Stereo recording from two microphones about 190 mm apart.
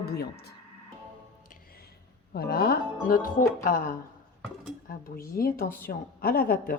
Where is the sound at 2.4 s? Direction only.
55° left (ahead or behind).